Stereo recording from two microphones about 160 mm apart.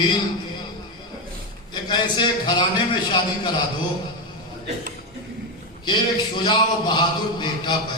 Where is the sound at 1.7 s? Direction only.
30° left (ahead or behind).